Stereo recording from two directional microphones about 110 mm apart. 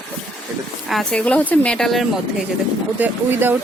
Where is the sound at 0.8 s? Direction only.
Centre (ahead or behind).